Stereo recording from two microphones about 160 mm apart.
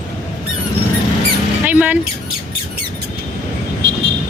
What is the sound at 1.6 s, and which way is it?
Speech, 10° right (ahead or behind).